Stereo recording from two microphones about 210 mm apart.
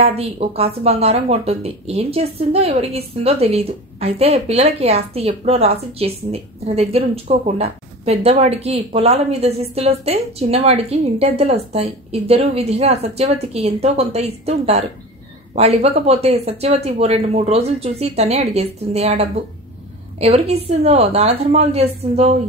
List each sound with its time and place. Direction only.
0.0 s speech: 30° right (ahead or behind)